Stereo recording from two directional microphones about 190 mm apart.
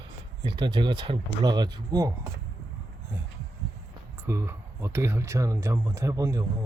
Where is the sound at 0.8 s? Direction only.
25° right (ahead or behind).